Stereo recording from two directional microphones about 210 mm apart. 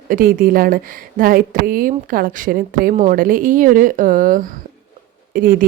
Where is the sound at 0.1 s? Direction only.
40° right (ahead or behind).